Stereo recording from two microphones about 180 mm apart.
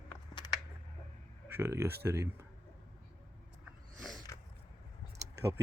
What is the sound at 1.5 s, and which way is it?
Speech, 15° right (ahead or behind).